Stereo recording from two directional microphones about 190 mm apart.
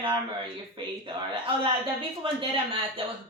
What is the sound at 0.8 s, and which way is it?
A woman's voice, 25° right (ahead or behind).